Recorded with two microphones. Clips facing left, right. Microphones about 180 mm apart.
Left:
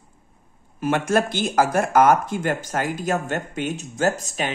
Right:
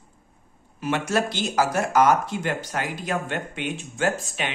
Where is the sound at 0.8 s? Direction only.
50° left (ahead or behind).